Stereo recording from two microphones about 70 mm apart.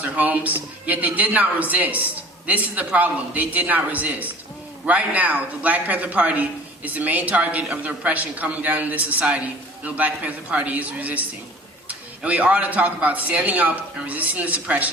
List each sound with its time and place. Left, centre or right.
0.0 s a man's voice: right